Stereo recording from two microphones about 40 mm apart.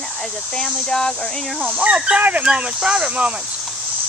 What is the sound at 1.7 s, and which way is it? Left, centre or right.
Speech, right.